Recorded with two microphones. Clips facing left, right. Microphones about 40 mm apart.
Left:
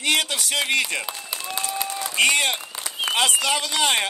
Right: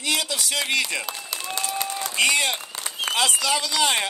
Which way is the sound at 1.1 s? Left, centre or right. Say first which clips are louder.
Even; left.